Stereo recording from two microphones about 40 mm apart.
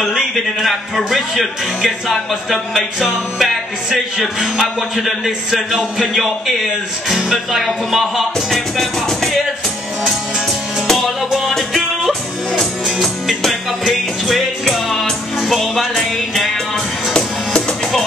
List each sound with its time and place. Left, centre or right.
0.2 s music: centre
3.0 s speech: centre
4.6 s music: centre
5.5 s speech: centre
7.5 s music: centre
10.9 s music: centre
14.2 s music: centre
17.1 s music: left